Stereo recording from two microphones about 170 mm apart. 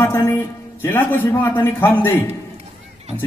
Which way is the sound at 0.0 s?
15° left (ahead or behind).